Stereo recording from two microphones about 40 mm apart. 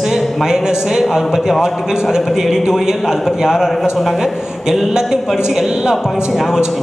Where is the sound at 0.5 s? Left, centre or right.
Centre.